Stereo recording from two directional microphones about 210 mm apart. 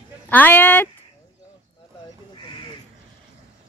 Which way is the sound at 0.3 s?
10° left (ahead or behind).